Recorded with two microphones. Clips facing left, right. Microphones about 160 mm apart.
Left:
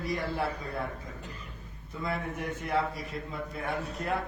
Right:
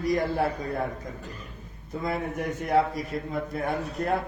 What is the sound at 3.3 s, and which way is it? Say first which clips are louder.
Speech: right 5 dB; 40° right (ahead or behind).